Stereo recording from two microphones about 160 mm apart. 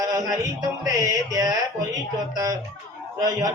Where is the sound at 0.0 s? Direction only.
25° right (ahead or behind).